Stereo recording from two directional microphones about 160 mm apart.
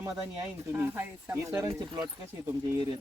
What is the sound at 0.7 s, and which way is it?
Speech, 10° right (ahead or behind).